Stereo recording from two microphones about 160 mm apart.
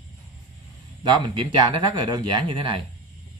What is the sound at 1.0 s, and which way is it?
Speech, 30° right (ahead or behind).